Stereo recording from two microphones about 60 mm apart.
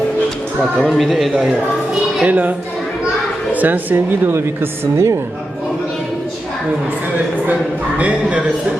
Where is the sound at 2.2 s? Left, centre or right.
Right.